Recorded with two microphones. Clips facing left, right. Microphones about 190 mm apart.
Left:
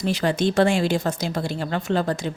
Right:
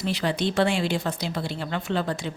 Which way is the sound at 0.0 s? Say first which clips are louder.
Left 4 dB; 45° left (ahead or behind).